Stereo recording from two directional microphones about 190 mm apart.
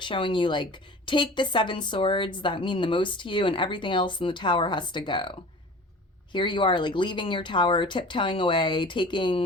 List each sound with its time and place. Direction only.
0.0 s a woman's voice: 25° left (ahead or behind)